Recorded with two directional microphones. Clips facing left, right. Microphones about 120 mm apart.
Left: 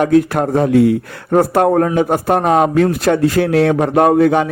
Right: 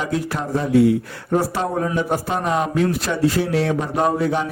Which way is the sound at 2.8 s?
55° left (ahead or behind).